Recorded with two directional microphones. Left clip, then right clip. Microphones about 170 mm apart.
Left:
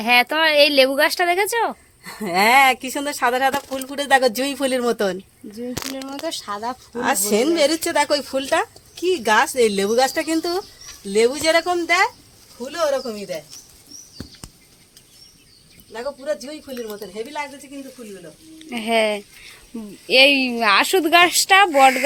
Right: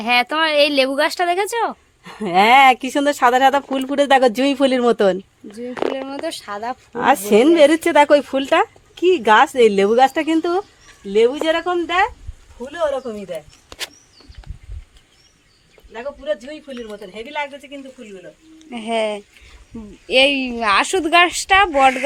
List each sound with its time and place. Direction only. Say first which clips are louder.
0.0 s speech: left 1 dB; centre (ahead or behind)
2.0 s speech: right 4 dB; 50° right (ahead or behind)
6.2 s speech: left 3 dB; 5° right (ahead or behind)
6.9 s speech: right 6 dB; 60° right (ahead or behind)
11.1 s speech: right 1 dB; 40° right (ahead or behind)
15.9 s speech: right 1 dB; 20° right (ahead or behind)
18.6 s speech: left 2 dB; centre (ahead or behind)